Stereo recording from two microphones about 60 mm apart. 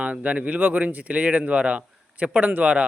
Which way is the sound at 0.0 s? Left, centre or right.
Right.